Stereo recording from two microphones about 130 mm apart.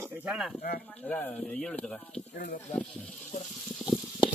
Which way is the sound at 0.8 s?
10° left (ahead or behind).